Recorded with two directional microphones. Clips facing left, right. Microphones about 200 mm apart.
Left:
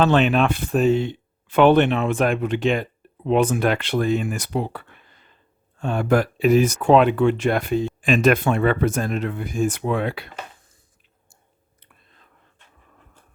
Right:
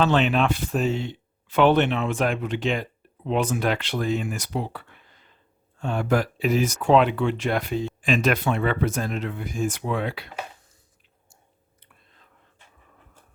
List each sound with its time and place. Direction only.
0.0 s speech: 55° left (ahead or behind)